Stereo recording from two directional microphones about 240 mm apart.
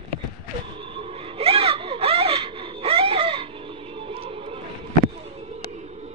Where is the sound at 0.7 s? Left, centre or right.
Right.